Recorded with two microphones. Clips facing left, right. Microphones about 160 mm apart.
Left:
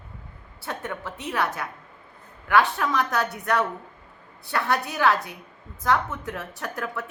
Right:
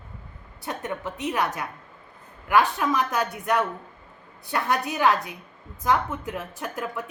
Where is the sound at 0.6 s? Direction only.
15° right (ahead or behind).